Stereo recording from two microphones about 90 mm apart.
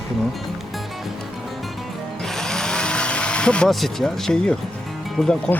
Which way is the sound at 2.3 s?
5° left (ahead or behind).